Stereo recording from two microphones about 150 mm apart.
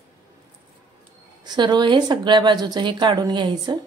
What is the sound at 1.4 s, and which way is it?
A woman's voice, 30° right (ahead or behind).